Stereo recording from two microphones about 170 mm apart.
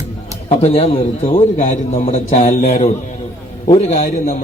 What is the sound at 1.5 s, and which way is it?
A man's voice, 45° left (ahead or behind).